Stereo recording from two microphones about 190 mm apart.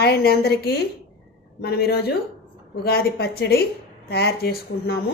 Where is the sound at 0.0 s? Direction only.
55° left (ahead or behind).